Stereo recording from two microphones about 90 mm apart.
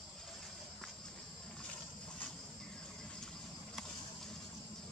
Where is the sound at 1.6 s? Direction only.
10° left (ahead or behind).